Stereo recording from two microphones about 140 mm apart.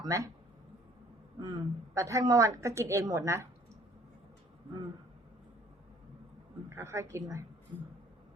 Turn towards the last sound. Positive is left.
turn(degrees=-20)  # may be behind; listen again after turning